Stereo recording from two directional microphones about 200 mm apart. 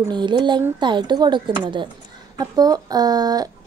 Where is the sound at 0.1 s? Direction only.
20° right (ahead or behind).